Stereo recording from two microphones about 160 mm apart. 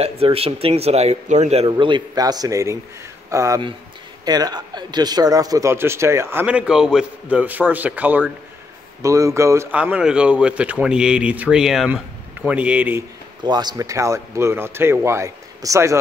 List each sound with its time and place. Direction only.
0.0 s a man's voice: 40° right (ahead or behind); by 13.0 s 10° right (ahead or behind)
13.4 s speech: 25° right (ahead or behind)